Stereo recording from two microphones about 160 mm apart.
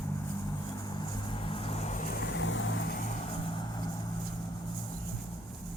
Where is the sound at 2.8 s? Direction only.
70° left (ahead or behind).